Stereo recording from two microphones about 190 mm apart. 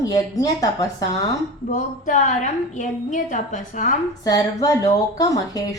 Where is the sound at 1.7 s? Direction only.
40° left (ahead or behind).